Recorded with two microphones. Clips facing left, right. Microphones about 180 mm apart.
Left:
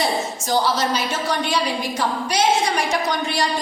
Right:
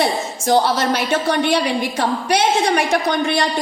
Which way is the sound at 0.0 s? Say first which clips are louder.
Right 3 dB; 60° right (ahead or behind).